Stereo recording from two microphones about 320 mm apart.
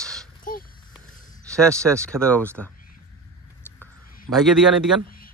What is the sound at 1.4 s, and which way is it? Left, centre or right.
Speech, centre.